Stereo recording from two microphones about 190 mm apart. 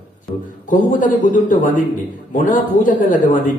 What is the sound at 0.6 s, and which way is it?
A man's voice, 45° left (ahead or behind).